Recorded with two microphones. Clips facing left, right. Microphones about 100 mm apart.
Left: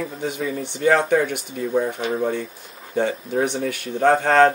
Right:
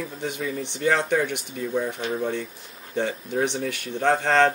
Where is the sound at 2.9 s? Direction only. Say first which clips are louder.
Left 4 dB; 5° left (ahead or behind).